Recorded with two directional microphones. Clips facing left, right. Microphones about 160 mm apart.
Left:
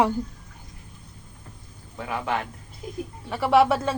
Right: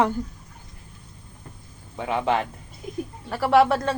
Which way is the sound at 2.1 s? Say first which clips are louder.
Right 6 dB; 25° right (ahead or behind).